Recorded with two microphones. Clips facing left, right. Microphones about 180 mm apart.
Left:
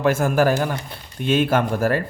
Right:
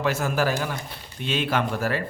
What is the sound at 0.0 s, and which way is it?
Speech, 50° left (ahead or behind).